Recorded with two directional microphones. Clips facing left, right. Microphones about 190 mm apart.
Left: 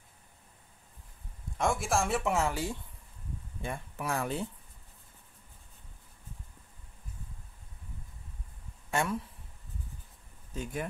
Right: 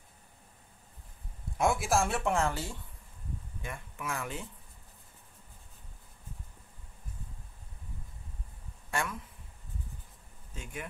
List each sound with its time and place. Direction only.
1.6 s speech: 5° right (ahead or behind); by 2.8 s 15° left (ahead or behind)
3.6 s speech: 35° left (ahead or behind)
8.9 s speech: 25° left (ahead or behind)
10.5 s speech: 40° left (ahead or behind)